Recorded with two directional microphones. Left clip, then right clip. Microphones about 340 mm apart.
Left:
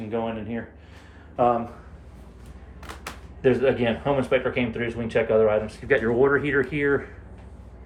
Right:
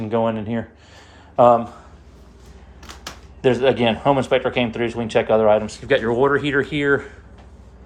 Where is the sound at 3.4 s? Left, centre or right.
Centre.